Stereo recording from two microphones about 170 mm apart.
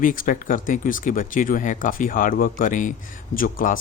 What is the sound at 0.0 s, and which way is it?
Speech, 55° left (ahead or behind).